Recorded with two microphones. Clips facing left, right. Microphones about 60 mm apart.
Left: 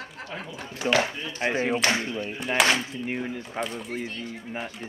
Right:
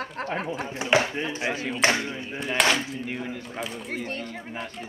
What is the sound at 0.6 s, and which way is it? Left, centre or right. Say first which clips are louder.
Speech: right 1 dB; right.